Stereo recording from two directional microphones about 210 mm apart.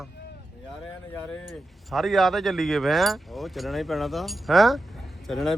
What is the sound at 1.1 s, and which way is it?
A man's voice, 5° left (ahead or behind).